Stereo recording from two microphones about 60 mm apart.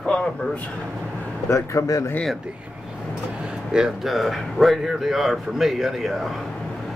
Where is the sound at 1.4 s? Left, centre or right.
Left.